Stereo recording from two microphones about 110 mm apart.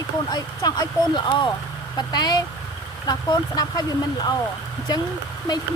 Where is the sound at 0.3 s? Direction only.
35° left (ahead or behind).